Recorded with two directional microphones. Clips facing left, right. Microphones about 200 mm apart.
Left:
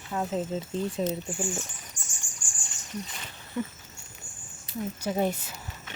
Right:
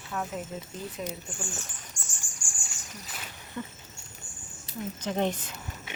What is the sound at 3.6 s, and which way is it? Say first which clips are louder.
Speech: left 6 dB; 10° left (ahead or behind).